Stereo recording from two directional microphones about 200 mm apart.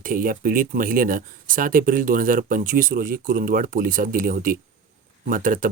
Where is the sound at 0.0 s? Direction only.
45° right (ahead or behind).